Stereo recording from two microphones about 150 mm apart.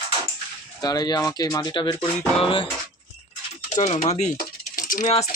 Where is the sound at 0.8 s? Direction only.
25° left (ahead or behind).